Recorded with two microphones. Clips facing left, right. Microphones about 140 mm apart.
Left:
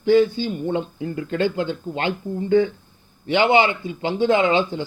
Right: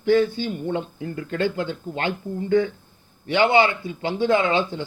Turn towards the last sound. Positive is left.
turn(degrees=15)  # may be behind; listen again after turning